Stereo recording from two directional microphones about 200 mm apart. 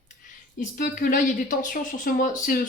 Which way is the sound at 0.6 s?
45° left (ahead or behind).